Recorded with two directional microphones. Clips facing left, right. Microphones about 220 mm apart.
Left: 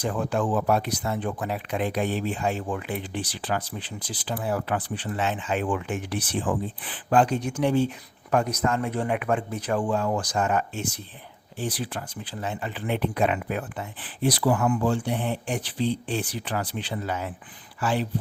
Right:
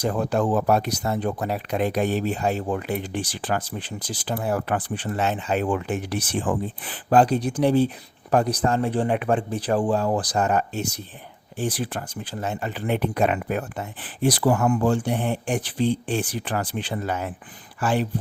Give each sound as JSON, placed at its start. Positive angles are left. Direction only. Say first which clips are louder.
{"t": 0.0, "sound": "speech", "louder": "right 3 dB", "side_deg": -40}
{"t": 11.5, "sound": "speech", "louder": "right 4 dB", "side_deg": -50}